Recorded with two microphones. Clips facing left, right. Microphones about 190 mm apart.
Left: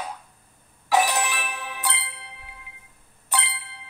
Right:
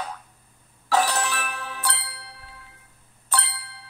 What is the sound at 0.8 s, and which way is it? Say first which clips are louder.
Music: left 1 dB; 15° left (ahead or behind).